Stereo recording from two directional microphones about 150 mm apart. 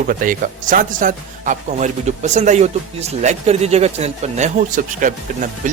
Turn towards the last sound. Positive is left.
turn(degrees=-60)  # may be behind; listen again after turning